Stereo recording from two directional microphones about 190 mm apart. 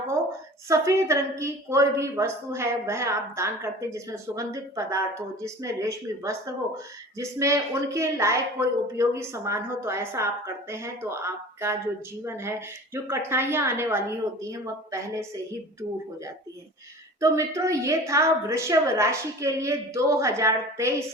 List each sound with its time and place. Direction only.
0.7 s a woman's voice: 15° right (ahead or behind)
17.2 s a woman's voice: 15° right (ahead or behind)